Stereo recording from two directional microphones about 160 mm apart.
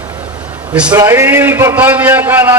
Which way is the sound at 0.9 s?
20° right (ahead or behind).